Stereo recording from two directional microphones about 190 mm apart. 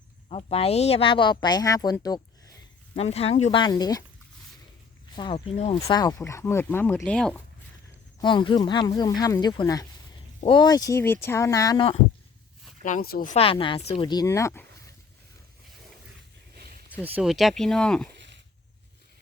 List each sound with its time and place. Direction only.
0.3 s speech: 30° left (ahead or behind)
2.9 s speech: 35° left (ahead or behind)
5.1 s speech: 25° left (ahead or behind)
5.8 s speech: 20° left (ahead or behind); by 7.4 s 5° left (ahead or behind)
8.2 s speech: 25° left (ahead or behind)
12.8 s speech: 45° left (ahead or behind)
13.3 s speech: 30° left (ahead or behind)
17.2 s speech: centre (ahead or behind)